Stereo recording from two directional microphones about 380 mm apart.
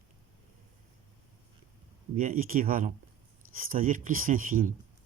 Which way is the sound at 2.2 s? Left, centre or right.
Right.